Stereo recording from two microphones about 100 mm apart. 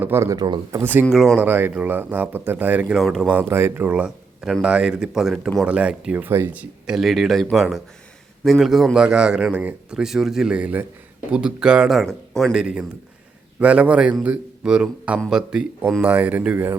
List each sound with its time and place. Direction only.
0.0 s speech: 25° right (ahead or behind)
0.3 s speech: 45° right (ahead or behind)
0.7 s speech: 20° right (ahead or behind)
1.1 s speech: centre (ahead or behind)
1.4 s a man's voice: 20° right (ahead or behind)
2.9 s a man's voice: 5° right (ahead or behind)
6.9 s a man's voice: centre (ahead or behind)
16.0 s speech: 20° right (ahead or behind)